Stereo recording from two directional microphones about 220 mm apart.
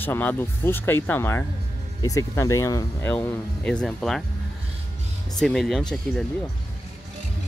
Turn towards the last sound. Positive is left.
turn(degrees=5)  # may be behind; listen again after turning